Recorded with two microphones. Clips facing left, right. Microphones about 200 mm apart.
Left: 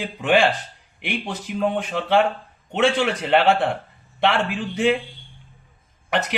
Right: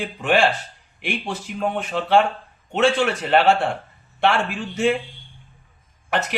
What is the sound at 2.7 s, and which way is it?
A man's voice, 15° left (ahead or behind).